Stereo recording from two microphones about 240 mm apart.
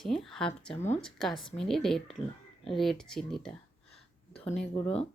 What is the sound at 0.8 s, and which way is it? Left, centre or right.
Speech, left.